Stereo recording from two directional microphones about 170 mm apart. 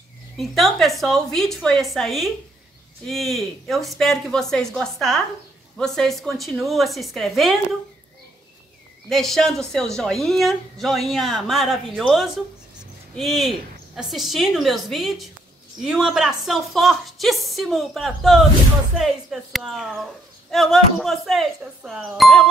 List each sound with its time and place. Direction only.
0.4 s a woman's voice: centre (ahead or behind)
9.1 s a woman's voice: centre (ahead or behind)